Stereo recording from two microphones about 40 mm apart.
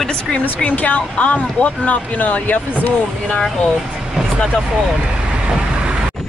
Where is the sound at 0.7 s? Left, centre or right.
Left.